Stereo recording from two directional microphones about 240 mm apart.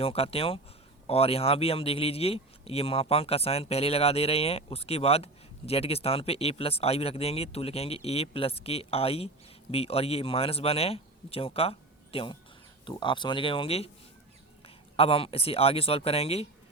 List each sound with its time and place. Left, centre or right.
0.0 s speech: left
14.9 s speech: left